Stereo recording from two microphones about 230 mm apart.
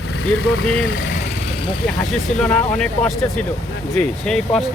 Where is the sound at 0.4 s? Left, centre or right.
Left.